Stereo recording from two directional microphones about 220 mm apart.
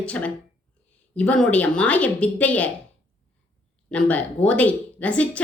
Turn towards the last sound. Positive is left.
turn(degrees=5)  # may be behind; listen again after turning